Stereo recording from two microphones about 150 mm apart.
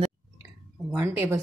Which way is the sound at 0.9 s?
15° right (ahead or behind).